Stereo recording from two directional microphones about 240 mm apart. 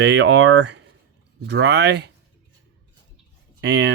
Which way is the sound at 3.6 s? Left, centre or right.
Right.